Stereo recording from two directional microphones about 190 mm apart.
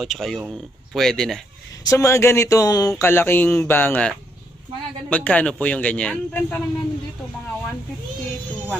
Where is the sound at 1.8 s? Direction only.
15° left (ahead or behind).